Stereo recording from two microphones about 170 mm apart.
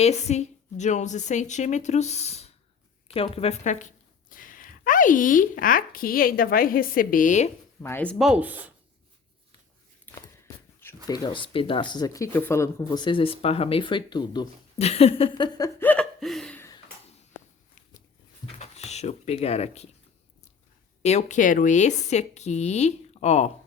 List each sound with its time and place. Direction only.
0.0 s a woman's voice: 40° left (ahead or behind)
7.8 s speech: 10° left (ahead or behind)
8.2 s speech: 5° right (ahead or behind)
10.1 s a sound: 10° left (ahead or behind)
10.8 s speech: 20° left (ahead or behind)
14.8 s speech: 35° left (ahead or behind)
15.8 s laughter: 5° left (ahead or behind)
18.6 s speech: 40° left (ahead or behind)
21.0 s speech: 40° left (ahead or behind)